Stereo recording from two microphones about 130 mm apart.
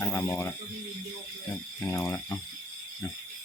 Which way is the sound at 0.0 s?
20° left (ahead or behind).